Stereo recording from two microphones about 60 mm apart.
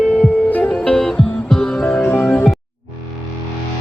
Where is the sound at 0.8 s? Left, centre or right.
Centre.